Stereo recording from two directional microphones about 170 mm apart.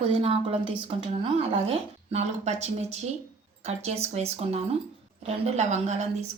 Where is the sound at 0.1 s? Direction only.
35° right (ahead or behind).